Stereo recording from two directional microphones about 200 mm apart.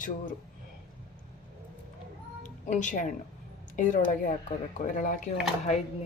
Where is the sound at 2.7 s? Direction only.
40° left (ahead or behind).